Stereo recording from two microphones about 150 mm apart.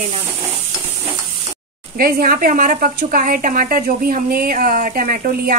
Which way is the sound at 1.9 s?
75° right (ahead or behind).